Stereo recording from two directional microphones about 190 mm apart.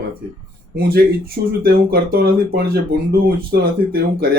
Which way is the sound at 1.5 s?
55° right (ahead or behind).